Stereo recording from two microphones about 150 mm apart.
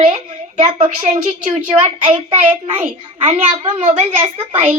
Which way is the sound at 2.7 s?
35° right (ahead or behind).